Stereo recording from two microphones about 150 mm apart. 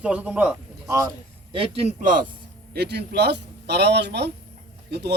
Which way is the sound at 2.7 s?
90° right.